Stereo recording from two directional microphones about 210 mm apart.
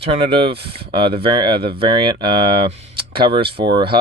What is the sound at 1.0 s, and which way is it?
Speech, 25° right (ahead or behind).